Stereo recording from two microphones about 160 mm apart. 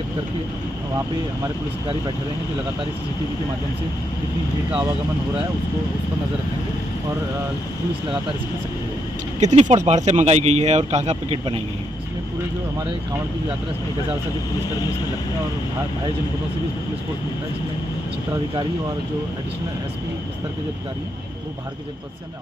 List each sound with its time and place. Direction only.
9.4 s speech: 45° right (ahead or behind)